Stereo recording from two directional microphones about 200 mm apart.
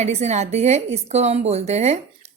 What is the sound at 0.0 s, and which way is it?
A woman's voice, 35° right (ahead or behind).